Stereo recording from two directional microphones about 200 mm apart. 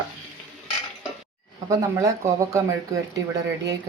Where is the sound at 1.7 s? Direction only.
15° right (ahead or behind).